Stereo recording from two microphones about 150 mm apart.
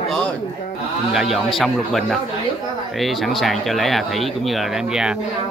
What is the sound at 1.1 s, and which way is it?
Speech, centre (ahead or behind).